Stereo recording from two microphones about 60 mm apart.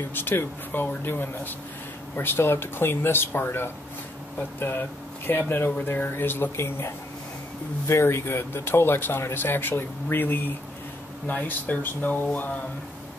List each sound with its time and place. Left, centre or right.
0.1 s speech: left